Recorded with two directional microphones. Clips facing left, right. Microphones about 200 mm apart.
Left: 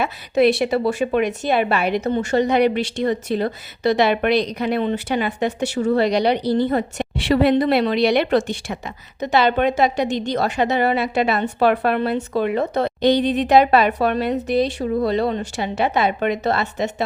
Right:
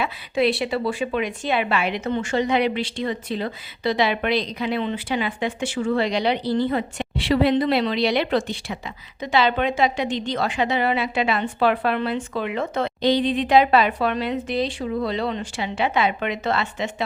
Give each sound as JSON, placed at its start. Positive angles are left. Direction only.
{"t": 0.0, "sound": "a woman's voice", "side_deg": 45}